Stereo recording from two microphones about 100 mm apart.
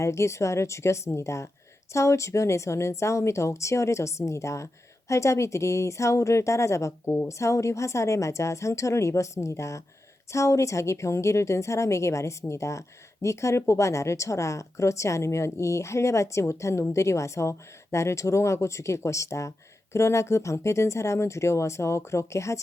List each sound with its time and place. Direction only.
0.0 s speech: 30° left (ahead or behind)